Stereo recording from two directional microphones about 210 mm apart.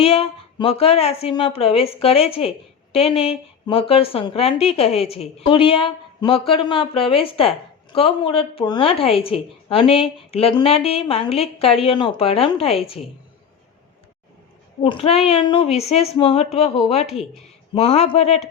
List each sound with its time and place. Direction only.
0.0 s a woman's voice: 25° left (ahead or behind)
14.8 s a woman's voice: 25° left (ahead or behind)